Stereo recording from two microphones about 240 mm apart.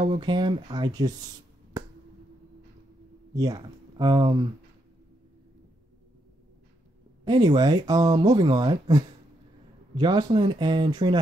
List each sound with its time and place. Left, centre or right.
0.0 s speech: centre
3.3 s speech: centre
7.2 s speech: centre